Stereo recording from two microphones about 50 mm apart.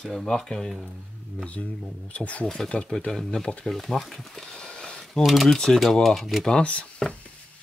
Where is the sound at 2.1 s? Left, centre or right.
Left.